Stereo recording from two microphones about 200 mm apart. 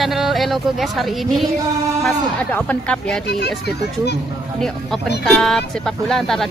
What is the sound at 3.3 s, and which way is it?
Speech, 55° left (ahead or behind).